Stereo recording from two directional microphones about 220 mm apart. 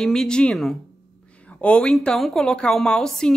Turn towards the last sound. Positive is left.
turn(degrees=0)  # may be behind; listen again after turning